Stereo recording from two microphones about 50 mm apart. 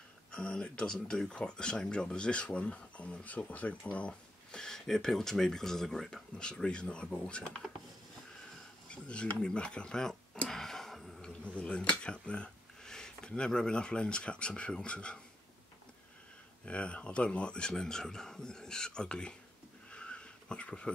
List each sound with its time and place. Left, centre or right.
0.3 s speech: centre
4.6 s speech: centre
8.8 s speech: left
10.5 s a sound: centre
11.4 s speech: left
16.6 s speech: left
19.9 s a sound: centre